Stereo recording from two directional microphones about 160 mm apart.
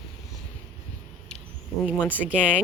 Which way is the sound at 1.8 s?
5° right (ahead or behind).